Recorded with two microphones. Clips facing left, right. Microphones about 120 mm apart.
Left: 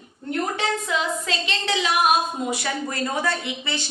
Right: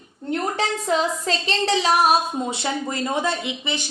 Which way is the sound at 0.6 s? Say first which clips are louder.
Right 3 dB; 40° right (ahead or behind).